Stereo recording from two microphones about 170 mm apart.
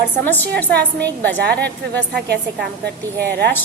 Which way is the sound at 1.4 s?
75° right (ahead or behind).